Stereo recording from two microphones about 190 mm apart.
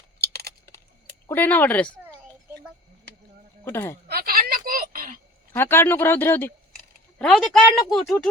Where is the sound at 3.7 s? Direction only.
10° left (ahead or behind).